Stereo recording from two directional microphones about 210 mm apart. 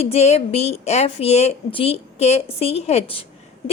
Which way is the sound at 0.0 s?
30° left (ahead or behind).